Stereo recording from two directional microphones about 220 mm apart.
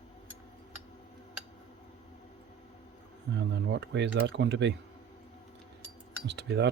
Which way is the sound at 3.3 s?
50° right (ahead or behind).